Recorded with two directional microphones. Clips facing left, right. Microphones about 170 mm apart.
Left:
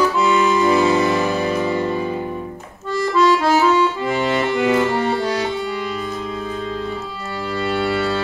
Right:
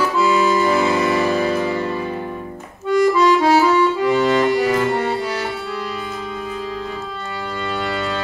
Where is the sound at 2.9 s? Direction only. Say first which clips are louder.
Right 2 dB; 15° right (ahead or behind).